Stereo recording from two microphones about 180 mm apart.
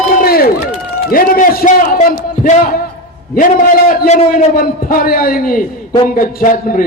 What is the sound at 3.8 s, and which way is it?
A man's voice, 45° left (ahead or behind).